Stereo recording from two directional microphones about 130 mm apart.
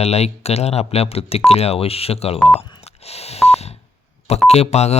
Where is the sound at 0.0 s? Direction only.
55° left (ahead or behind).